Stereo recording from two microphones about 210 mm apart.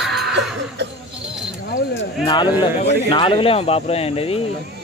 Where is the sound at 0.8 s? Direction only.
55° right (ahead or behind).